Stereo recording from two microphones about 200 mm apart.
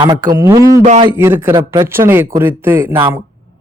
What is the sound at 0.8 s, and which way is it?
Speech, 35° right (ahead or behind).